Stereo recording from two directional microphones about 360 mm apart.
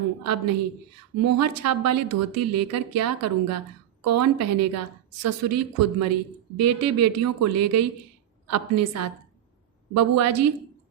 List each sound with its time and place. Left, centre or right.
0.2 s a woman's voice: right